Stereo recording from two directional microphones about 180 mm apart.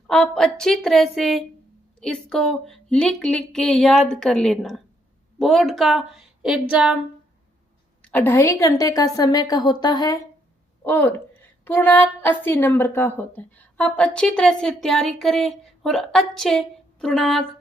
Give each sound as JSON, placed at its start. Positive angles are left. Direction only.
{"t": 0.1, "sound": "a woman's voice", "side_deg": 5}
{"t": 8.0, "sound": "a woman's voice", "side_deg": 10}
{"t": 10.8, "sound": "a woman's voice", "side_deg": 10}